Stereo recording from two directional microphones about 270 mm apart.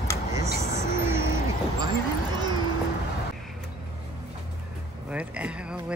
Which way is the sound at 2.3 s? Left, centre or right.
Centre.